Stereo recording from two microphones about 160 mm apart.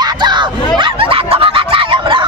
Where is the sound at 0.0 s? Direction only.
30° right (ahead or behind).